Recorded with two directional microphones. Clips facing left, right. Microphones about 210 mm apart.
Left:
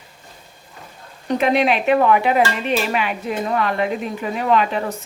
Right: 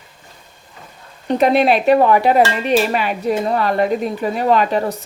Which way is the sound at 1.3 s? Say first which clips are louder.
Right 4 dB; 35° right (ahead or behind).